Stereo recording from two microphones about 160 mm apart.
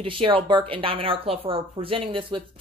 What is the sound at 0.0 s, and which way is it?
Speech, 35° right (ahead or behind).